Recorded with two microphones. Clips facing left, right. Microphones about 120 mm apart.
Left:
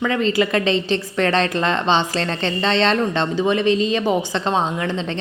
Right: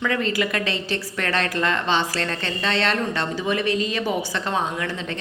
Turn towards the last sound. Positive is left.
turn(degrees=25)  # may be behind; listen again after turning